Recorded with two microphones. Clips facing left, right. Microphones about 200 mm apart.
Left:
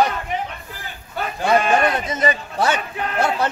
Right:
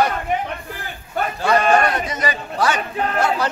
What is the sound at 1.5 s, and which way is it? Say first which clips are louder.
Sheep: right 1 dB; 50° right (ahead or behind).